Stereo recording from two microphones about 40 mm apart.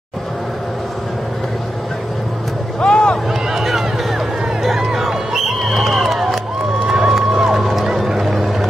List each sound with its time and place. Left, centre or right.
2.8 s a sound: left
3.5 s run: centre
4.6 s music: centre
6.1 s crowd: centre
7.3 s music: centre